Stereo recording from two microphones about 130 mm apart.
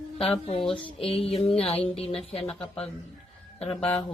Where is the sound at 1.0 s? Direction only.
50° left (ahead or behind).